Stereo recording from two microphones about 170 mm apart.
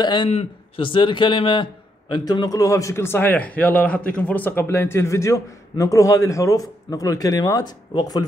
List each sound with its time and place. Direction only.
0.0 s speech: 30° left (ahead or behind)